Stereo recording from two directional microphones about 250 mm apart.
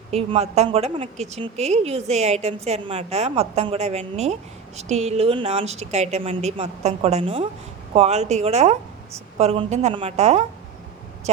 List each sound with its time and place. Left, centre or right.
0.1 s a woman's voice: right